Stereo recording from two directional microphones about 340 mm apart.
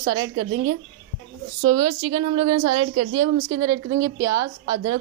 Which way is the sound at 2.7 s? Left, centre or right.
Right.